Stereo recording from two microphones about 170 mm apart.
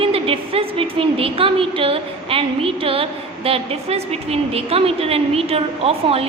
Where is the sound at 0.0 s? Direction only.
35° right (ahead or behind).